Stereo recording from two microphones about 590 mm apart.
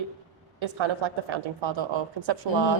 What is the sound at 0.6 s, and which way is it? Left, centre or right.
A woman's voice, right.